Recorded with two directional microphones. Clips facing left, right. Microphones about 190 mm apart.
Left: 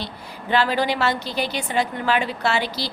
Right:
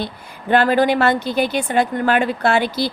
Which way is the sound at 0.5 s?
50° right (ahead or behind).